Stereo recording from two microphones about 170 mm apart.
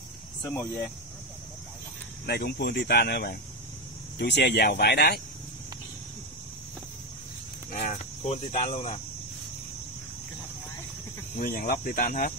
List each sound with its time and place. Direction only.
0.5 s speech: 10° left (ahead or behind)
2.2 s speech: 70° left (ahead or behind)
7.7 s speech: 40° left (ahead or behind)
11.3 s speech: 55° left (ahead or behind)